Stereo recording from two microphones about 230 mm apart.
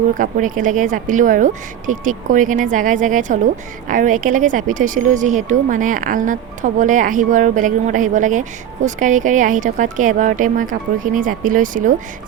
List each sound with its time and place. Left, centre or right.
0.1 s speech: right